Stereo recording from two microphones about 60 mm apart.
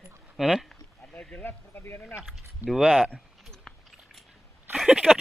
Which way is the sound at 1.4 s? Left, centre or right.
Left.